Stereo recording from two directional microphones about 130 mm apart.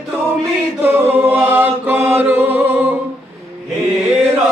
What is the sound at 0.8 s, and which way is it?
A capella, 15° right (ahead or behind).